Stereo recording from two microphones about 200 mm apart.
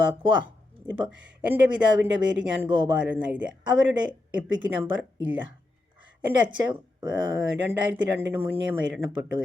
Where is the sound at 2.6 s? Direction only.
25° right (ahead or behind).